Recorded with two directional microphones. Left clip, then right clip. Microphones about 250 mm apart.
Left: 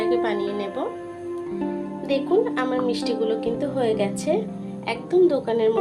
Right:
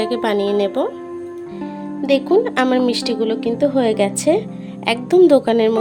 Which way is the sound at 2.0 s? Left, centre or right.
Right.